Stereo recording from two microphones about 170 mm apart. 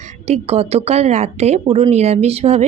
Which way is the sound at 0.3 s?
40° right (ahead or behind).